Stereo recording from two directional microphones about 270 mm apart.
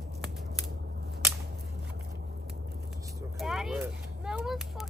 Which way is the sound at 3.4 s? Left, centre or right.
Centre.